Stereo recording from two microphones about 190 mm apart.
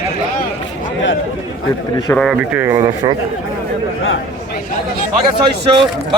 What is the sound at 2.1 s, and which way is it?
Speech, centre (ahead or behind).